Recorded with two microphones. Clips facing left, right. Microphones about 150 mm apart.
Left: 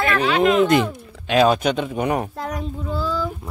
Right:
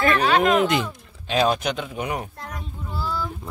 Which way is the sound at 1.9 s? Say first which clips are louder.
Left 6 dB; 50° left (ahead or behind).